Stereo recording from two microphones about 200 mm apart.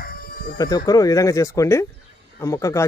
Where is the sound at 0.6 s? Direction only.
20° left (ahead or behind).